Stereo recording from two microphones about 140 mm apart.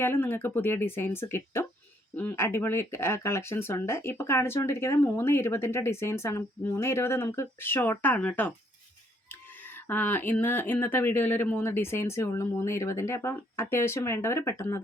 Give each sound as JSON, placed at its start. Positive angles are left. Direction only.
{"t": 0.0, "sound": "speech", "side_deg": 15}